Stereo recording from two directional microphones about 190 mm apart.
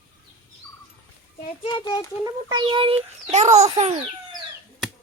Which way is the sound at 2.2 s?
20° right (ahead or behind).